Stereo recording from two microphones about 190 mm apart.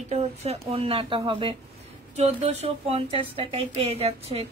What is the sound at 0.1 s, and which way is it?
A woman's voice, 35° right (ahead or behind).